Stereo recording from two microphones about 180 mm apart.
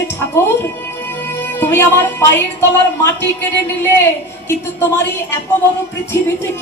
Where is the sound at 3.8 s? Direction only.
15° left (ahead or behind).